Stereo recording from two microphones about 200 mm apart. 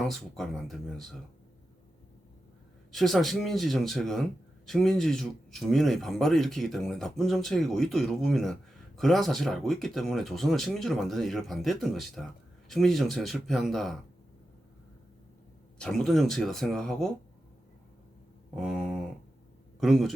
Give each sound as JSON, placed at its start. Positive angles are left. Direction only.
{"t": 0.0, "sound": "a man's voice", "side_deg": 0}
{"t": 2.9, "sound": "a man's voice", "side_deg": 0}
{"t": 15.8, "sound": "a man's voice", "side_deg": 0}
{"t": 18.5, "sound": "a sound", "side_deg": 0}
{"t": 19.8, "sound": "a man's voice", "side_deg": 0}